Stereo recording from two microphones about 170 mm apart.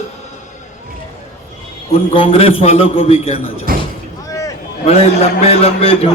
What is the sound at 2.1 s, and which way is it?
A man's voice, 35° left (ahead or behind).